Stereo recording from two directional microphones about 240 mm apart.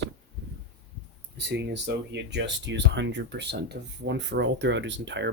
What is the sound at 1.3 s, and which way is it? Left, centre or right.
Speech, right.